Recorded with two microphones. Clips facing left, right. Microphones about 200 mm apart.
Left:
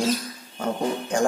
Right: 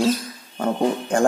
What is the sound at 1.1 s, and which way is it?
Speech, 55° right (ahead or behind).